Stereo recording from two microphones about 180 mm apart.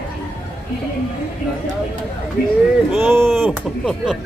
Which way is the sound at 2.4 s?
55° left (ahead or behind).